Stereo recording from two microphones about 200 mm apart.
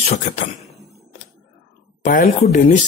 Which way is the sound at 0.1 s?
40° left (ahead or behind).